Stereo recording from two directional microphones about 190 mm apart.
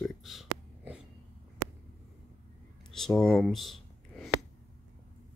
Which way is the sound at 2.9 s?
Centre (ahead or behind).